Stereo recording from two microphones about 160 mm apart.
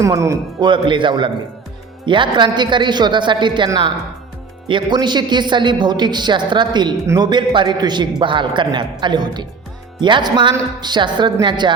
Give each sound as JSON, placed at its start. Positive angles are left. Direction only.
{"t": 0.0, "sound": "a man's voice", "side_deg": -20}